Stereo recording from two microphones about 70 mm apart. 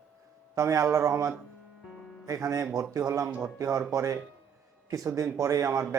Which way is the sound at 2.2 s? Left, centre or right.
Right.